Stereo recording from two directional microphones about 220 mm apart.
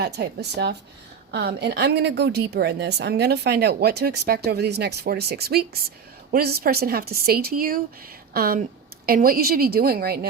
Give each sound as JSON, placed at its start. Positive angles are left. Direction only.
{"t": 0.0, "sound": "a woman's voice", "side_deg": -50}